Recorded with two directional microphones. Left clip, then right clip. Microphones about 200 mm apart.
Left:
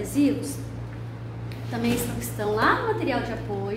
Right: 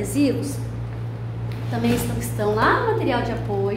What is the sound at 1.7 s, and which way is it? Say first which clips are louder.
A woman's voice: right 3 dB; 5° right (ahead or behind).